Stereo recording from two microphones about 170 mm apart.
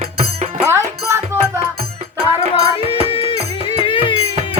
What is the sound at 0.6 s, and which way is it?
Music, 15° right (ahead or behind).